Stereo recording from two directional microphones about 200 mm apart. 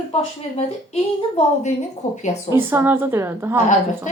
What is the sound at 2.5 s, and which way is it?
A woman's voice, 10° right (ahead or behind).